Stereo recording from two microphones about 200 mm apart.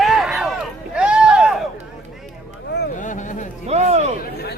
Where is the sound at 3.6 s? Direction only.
30° right (ahead or behind).